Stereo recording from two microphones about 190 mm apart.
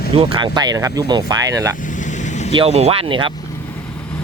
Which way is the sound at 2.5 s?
30° right (ahead or behind).